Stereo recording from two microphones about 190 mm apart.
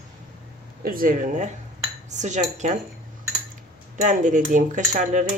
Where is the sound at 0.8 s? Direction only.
50° right (ahead or behind).